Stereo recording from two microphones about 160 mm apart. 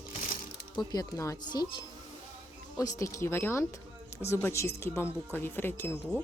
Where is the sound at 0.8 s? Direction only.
25° left (ahead or behind).